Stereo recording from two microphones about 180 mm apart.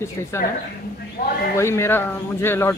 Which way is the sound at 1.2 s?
55° left (ahead or behind).